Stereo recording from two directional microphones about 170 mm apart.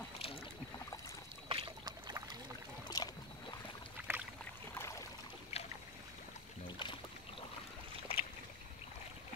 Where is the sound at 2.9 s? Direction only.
25° left (ahead or behind).